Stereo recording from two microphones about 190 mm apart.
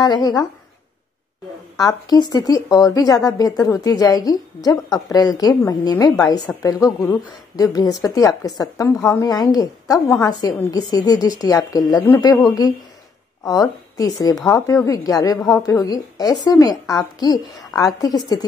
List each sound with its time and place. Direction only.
0.0 s a woman's voice: 20° left (ahead or behind)
1.8 s a woman's voice: 20° left (ahead or behind)